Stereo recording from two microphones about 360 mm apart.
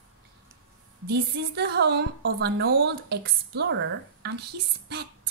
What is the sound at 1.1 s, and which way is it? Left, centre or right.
A woman's voice, right.